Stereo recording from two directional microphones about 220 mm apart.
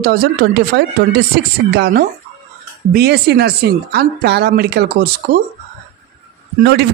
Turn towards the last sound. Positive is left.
turn(degrees=-45)  # may be behind; listen again after turning